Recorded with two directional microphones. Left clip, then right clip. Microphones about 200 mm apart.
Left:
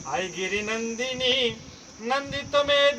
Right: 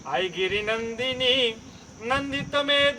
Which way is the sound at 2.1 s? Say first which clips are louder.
Even; 5° left (ahead or behind).